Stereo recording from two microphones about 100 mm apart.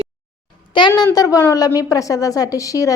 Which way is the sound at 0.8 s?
55° left (ahead or behind).